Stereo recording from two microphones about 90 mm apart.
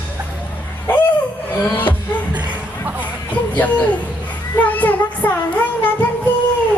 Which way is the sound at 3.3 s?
20° left (ahead or behind).